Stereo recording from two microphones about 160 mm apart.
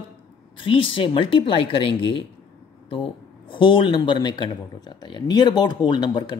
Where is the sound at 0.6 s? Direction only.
35° left (ahead or behind).